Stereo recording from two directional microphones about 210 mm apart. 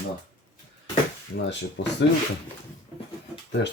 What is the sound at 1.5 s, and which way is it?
Speech, 55° left (ahead or behind).